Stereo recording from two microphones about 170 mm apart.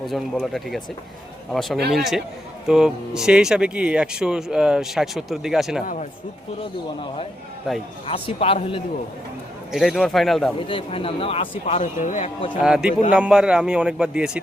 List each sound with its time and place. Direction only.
0.1 s speech: centre (ahead or behind)
5.8 s speech: 50° left (ahead or behind)
7.7 s speech: centre (ahead or behind)
8.0 s speech: 35° left (ahead or behind)
9.7 s speech: centre (ahead or behind)
10.7 s speech: 30° left (ahead or behind)
11.5 s speech: 45° left (ahead or behind)
12.6 s speech: 5° right (ahead or behind)